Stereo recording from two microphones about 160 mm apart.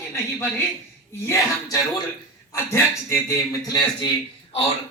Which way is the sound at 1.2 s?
20° left (ahead or behind).